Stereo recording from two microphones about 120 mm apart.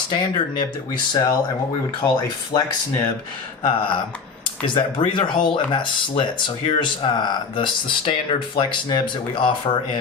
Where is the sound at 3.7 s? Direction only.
45° left (ahead or behind).